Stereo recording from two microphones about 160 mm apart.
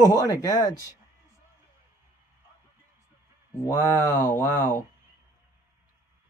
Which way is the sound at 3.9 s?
15° left (ahead or behind).